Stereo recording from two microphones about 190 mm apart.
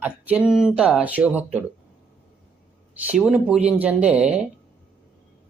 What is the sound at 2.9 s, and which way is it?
Speech, 5° right (ahead or behind).